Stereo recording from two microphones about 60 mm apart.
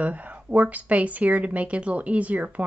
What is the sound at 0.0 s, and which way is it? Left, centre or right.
Speech, right.